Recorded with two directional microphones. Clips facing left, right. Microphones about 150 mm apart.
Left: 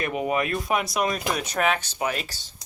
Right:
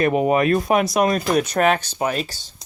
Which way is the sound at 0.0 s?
40° right (ahead or behind).